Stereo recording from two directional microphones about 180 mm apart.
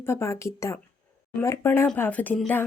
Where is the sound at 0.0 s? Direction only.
15° left (ahead or behind).